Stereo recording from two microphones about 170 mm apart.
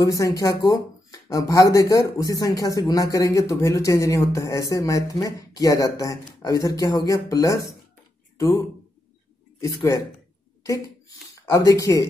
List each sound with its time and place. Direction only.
0.0 s speech: 20° left (ahead or behind)
10.6 s a sound: 20° left (ahead or behind)
11.3 s speech: 20° left (ahead or behind)